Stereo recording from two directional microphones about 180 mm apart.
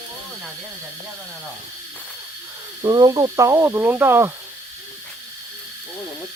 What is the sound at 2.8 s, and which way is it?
Speech, 20° right (ahead or behind).